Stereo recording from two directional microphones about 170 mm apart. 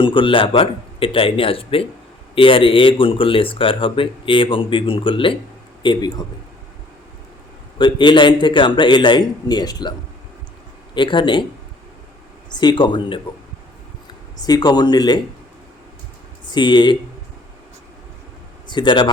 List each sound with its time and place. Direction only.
0.0 s a man's voice: 30° left (ahead or behind)
7.8 s a man's voice: 30° left (ahead or behind)
10.9 s a man's voice: 30° left (ahead or behind)
12.5 s a man's voice: 25° left (ahead or behind)
14.4 s a man's voice: 25° left (ahead or behind)
16.5 s a man's voice: 25° left (ahead or behind)
18.7 s a man's voice: 25° left (ahead or behind)